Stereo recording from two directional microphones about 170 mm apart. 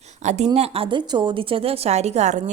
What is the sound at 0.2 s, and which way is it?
A woman's voice, 40° right (ahead or behind).